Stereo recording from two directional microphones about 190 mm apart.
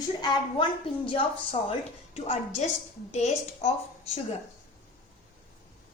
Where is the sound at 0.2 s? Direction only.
25° left (ahead or behind).